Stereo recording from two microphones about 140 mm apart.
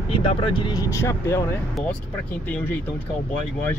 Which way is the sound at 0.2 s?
35° left (ahead or behind).